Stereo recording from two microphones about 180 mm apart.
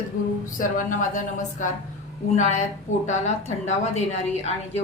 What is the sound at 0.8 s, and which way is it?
A woman's voice, 45° left (ahead or behind).